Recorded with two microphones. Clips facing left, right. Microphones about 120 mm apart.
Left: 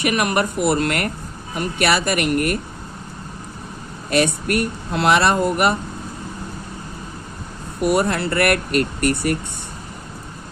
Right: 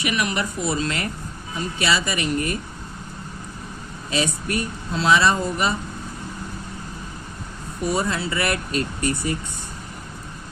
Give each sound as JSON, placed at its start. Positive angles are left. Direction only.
{"t": 0.0, "sound": "speech", "side_deg": 50}
{"t": 4.1, "sound": "speech", "side_deg": 65}
{"t": 7.8, "sound": "speech", "side_deg": 65}